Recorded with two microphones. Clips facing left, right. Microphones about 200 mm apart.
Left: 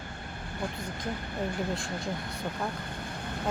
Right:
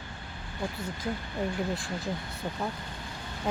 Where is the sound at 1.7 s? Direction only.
Centre (ahead or behind).